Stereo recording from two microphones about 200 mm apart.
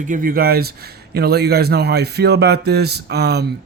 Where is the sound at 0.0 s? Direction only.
40° right (ahead or behind).